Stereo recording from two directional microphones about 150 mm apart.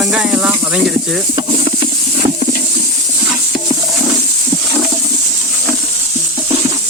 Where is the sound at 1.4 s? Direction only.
35° right (ahead or behind).